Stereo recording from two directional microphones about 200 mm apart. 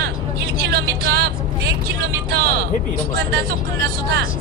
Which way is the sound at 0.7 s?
50° right (ahead or behind).